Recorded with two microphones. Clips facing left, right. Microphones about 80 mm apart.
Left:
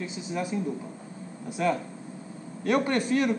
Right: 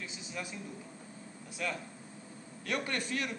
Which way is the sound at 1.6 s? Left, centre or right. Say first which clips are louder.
Left 11 dB; left.